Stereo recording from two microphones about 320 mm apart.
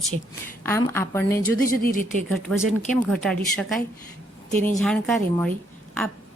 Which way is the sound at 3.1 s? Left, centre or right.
Centre.